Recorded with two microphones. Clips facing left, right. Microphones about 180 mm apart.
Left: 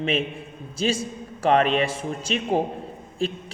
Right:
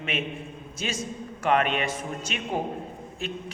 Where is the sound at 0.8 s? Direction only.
30° left (ahead or behind).